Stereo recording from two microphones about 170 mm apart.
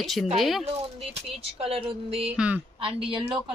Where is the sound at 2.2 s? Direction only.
5° right (ahead or behind).